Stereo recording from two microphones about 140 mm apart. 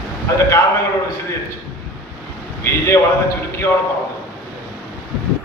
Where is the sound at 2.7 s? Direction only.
20° left (ahead or behind).